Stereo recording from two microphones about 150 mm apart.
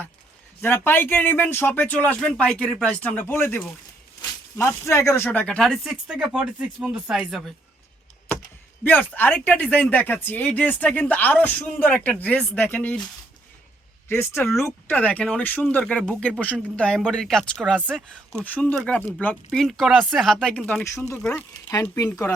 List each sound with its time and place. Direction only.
0.6 s speech: 15° left (ahead or behind); by 7.5 s centre (ahead or behind)
8.8 s speech: 10° left (ahead or behind)
14.1 s speech: 15° left (ahead or behind)
17.7 s speech: 10° right (ahead or behind)
18.5 s speech: 5° left (ahead or behind)
21.9 s speech: 20° left (ahead or behind)